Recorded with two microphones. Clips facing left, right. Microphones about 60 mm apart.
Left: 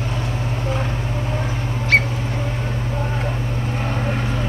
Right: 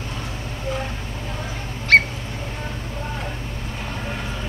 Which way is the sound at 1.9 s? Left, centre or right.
Right.